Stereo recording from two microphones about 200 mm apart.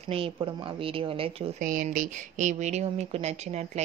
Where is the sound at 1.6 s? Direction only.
40° right (ahead or behind).